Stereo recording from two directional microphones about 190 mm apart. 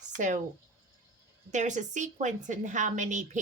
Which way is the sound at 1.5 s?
40° right (ahead or behind).